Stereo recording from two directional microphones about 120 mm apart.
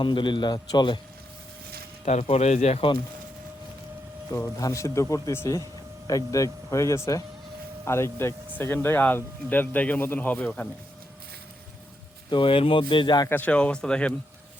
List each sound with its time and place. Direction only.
0.0 s a man's voice: 40° left (ahead or behind)
2.2 s speech: 65° left (ahead or behind)
4.5 s a man's voice: 25° left (ahead or behind); by 10.7 s 10° left (ahead or behind)
12.3 s speech: 45° left (ahead or behind)
13.2 s speech: 15° left (ahead or behind)